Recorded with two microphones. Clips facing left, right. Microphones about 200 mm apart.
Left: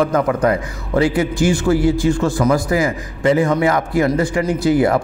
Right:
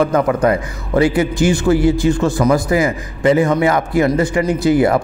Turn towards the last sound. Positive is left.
turn(degrees=-20)  # may be behind; listen again after turning